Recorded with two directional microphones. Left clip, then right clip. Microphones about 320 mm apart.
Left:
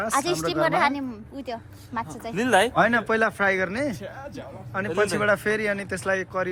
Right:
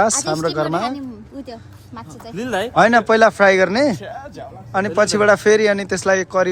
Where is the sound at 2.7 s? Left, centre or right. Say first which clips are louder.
Right 8 dB; centre.